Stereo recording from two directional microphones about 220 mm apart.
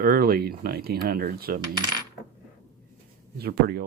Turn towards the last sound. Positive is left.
turn(degrees=-45)  # may be behind; listen again after turning